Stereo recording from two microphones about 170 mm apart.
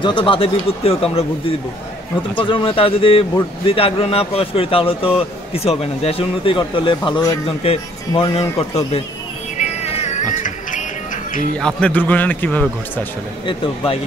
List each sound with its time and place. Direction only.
0.0 s speech: 30° left (ahead or behind)
2.3 s speech: 30° left (ahead or behind)
9.6 s music: 40° left (ahead or behind)
11.6 s a man's voice: 10° left (ahead or behind)